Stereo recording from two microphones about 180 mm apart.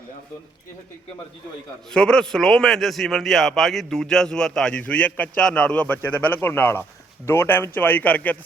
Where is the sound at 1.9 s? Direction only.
5° left (ahead or behind).